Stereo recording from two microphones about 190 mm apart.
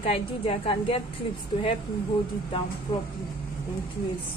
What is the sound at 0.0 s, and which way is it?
A woman's voice, 30° left (ahead or behind).